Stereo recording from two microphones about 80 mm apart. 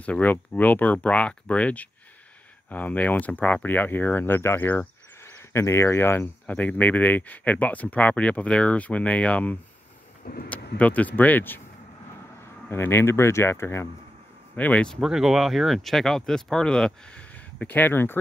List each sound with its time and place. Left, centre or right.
0.0 s speech: centre
6.4 s speech: centre
12.6 s speech: left
14.5 s speech: centre
14.9 s speech: centre; by 18.2 s left